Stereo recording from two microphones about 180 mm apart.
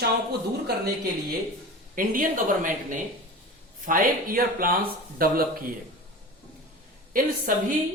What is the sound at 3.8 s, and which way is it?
Speech, 50° right (ahead or behind).